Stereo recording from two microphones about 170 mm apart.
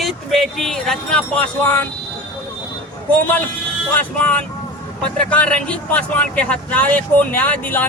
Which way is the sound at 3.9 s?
10° left (ahead or behind).